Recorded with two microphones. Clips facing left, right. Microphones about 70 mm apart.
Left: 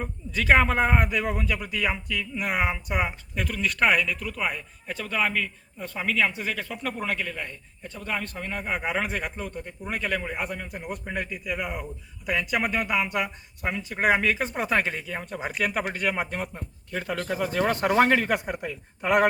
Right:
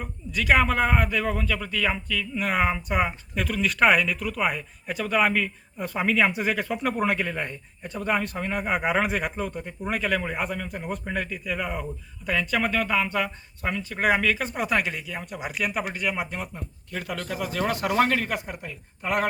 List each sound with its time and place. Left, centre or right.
0.0 s a man's voice: left; by 5.5 s centre
5.7 s a man's voice: centre; by 16.5 s left
17.3 s a man's voice: centre
17.7 s speech: left
17.9 s a man's voice: centre